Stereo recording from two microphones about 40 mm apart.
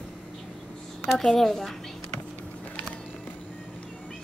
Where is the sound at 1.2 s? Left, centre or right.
Centre.